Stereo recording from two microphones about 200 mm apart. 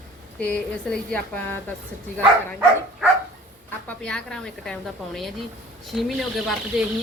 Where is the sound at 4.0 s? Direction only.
5° left (ahead or behind).